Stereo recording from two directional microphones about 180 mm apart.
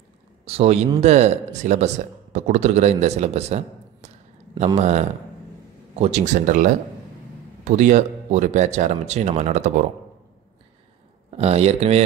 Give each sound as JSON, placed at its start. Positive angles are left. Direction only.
{"t": 0.5, "sound": "speech", "side_deg": -35}
{"t": 11.2, "sound": "speech", "side_deg": -35}